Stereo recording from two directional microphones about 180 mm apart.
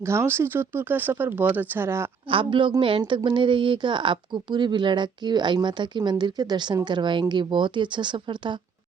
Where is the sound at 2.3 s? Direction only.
30° right (ahead or behind).